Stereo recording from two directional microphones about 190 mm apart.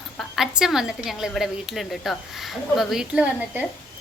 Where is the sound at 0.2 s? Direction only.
Centre (ahead or behind).